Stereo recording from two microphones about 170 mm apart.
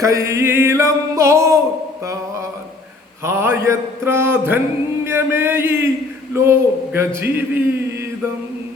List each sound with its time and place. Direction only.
0.0 s mantra: 20° right (ahead or behind)
3.2 s mantra: 15° right (ahead or behind)